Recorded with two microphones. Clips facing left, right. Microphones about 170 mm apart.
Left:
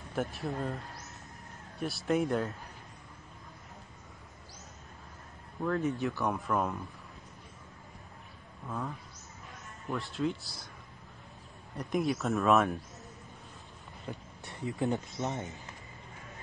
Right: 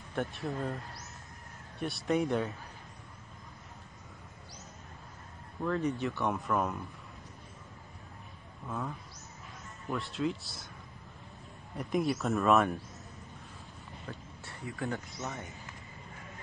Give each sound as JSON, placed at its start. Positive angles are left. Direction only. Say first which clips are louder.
{"t": 0.1, "sound": "speech", "louder": "left 1 dB", "side_deg": 0}
{"t": 1.8, "sound": "speech", "louder": "even", "side_deg": 0}
{"t": 5.6, "sound": "speech", "louder": "left 1 dB", "side_deg": 0}
{"t": 8.6, "sound": "speech", "louder": "even", "side_deg": 0}
{"t": 11.7, "sound": "speech", "louder": "even", "side_deg": 0}
{"t": 14.0, "sound": "speech", "louder": "left 4 dB", "side_deg": 20}